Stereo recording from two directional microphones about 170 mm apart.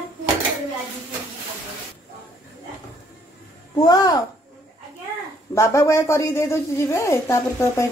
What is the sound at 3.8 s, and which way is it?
Speech, 20° left (ahead or behind).